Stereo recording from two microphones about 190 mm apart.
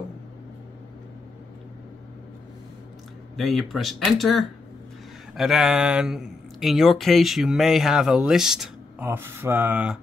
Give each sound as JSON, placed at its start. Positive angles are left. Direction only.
{"t": 3.3, "sound": "speech", "side_deg": 0}